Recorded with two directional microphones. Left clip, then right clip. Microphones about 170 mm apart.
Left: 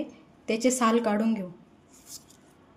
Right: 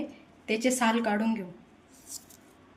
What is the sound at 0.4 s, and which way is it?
A woman's voice, 65° left (ahead or behind).